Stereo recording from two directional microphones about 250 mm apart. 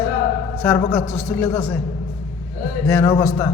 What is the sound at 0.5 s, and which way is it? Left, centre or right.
A woman's voice, centre.